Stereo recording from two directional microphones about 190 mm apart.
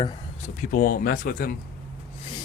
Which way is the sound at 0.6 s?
50° left (ahead or behind).